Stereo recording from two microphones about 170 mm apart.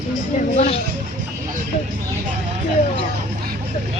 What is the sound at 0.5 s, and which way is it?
Speech, 40° left (ahead or behind).